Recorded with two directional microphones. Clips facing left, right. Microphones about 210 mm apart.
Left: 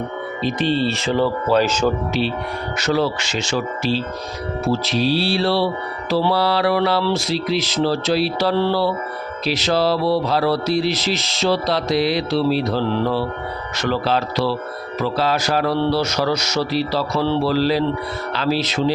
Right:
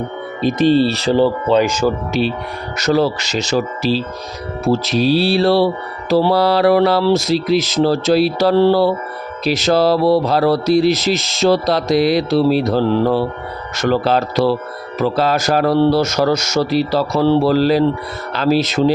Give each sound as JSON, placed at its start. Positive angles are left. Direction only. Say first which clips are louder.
{"t": 0.4, "sound": "speech", "louder": "right 7 dB", "side_deg": -40}
{"t": 1.6, "sound": "speech", "louder": "right 2 dB", "side_deg": -10}
{"t": 2.2, "sound": "mantra", "louder": "right 6 dB", "side_deg": -45}
{"t": 2.7, "sound": "speech", "louder": "right 5 dB", "side_deg": -40}
{"t": 4.7, "sound": "mantra", "louder": "right 5 dB", "side_deg": -45}